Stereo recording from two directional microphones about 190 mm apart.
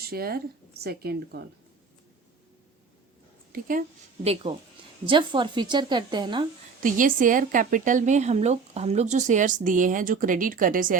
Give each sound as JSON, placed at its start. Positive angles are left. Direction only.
{"t": 0.0, "sound": "speech", "side_deg": -55}
{"t": 3.5, "sound": "speech", "side_deg": -45}
{"t": 4.2, "sound": "a woman's voice", "side_deg": -30}
{"t": 6.8, "sound": "speech", "side_deg": -45}